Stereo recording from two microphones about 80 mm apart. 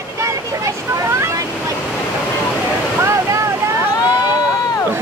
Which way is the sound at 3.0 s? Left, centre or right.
Right.